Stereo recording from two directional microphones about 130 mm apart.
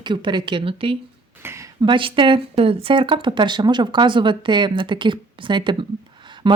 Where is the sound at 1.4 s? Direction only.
25° right (ahead or behind).